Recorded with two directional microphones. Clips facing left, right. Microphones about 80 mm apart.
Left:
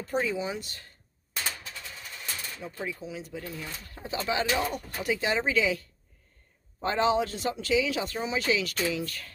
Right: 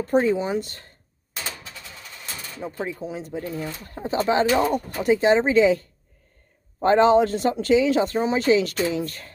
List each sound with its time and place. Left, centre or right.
0.0 s speech: right
2.6 s speech: right